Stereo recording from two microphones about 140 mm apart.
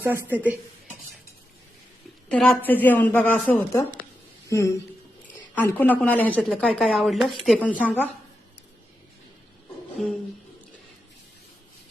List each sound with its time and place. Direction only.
0.0 s speech: 15° right (ahead or behind)
2.3 s a woman's voice: 5° left (ahead or behind)
2.6 s a woman's voice: 15° left (ahead or behind)
10.0 s a woman's voice: centre (ahead or behind)